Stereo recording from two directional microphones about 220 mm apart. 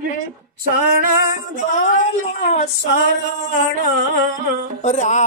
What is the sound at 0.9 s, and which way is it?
Music, 40° right (ahead or behind).